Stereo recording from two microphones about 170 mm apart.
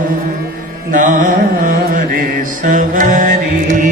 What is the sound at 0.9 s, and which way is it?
Carnatic music, 50° right (ahead or behind).